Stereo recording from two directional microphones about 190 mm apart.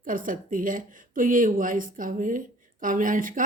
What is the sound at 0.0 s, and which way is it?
Speech, 45° right (ahead or behind).